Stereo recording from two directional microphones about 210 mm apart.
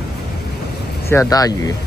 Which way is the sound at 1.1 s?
15° left (ahead or behind).